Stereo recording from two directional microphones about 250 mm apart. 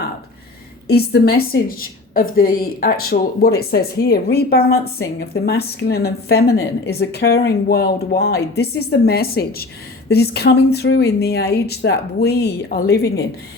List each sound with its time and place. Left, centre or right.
0.9 s a woman's voice: left